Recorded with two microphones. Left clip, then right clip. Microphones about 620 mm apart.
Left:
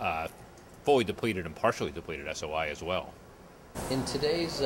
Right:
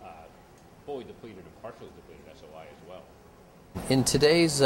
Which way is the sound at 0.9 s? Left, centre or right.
Left.